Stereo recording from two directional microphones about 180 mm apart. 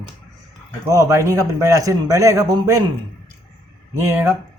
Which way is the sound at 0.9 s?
15° right (ahead or behind).